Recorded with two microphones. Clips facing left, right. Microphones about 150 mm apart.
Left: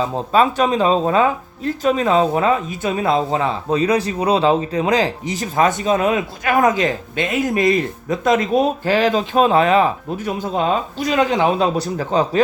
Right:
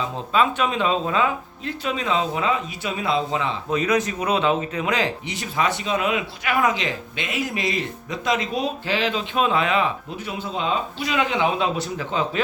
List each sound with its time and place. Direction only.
0.0 s speech: 40° left (ahead or behind)